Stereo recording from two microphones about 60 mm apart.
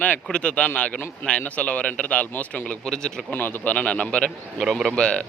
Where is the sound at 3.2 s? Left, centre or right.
Left.